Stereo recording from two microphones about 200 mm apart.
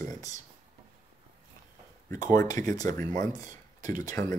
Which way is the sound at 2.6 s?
15° left (ahead or behind).